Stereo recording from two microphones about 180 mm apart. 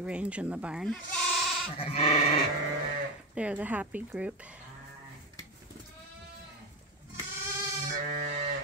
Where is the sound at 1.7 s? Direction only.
35° left (ahead or behind).